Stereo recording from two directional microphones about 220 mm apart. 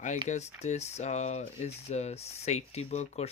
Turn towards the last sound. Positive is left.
turn(degrees=30)  # may be behind; listen again after turning